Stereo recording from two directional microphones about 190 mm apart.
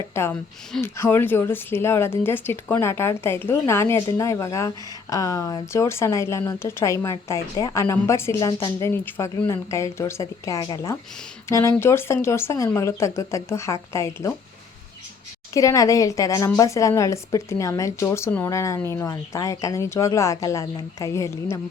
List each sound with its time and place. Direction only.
0.1 s a woman's voice: 10° left (ahead or behind)
15.5 s a woman's voice: 15° left (ahead or behind)